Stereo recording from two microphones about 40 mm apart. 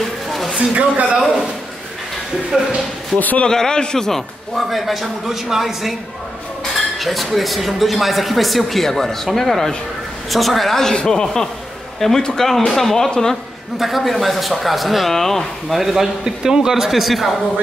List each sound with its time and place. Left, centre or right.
0.3 s a sound: centre
0.6 s speech: right
2.5 s a man's voice: centre
3.2 s a man's voice: left
3.4 s a man's voice: centre
4.6 s speech: centre
7.0 s a man's voice: centre
12.4 s a man's voice: centre
13.7 s speech: centre
15.8 s a man's voice: centre